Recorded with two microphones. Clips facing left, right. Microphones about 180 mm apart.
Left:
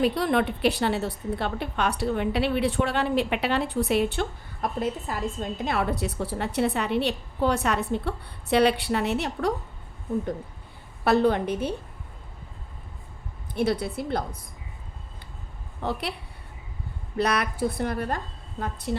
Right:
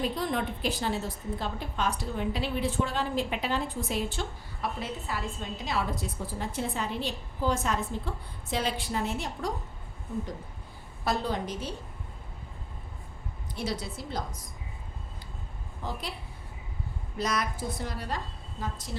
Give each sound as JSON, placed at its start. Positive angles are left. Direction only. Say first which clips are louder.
{"t": 0.0, "sound": "a woman's voice", "louder": "left 7 dB", "side_deg": 70}
{"t": 4.8, "sound": "a woman's voice", "louder": "left 6 dB", "side_deg": 45}
{"t": 11.0, "sound": "a woman's voice", "louder": "left 9 dB", "side_deg": 65}
{"t": 13.5, "sound": "a woman's voice", "louder": "left 9 dB", "side_deg": 55}
{"t": 15.8, "sound": "a woman's voice", "louder": "left 7 dB", "side_deg": 65}
{"t": 17.2, "sound": "a woman's voice", "louder": "left 6 dB", "side_deg": 65}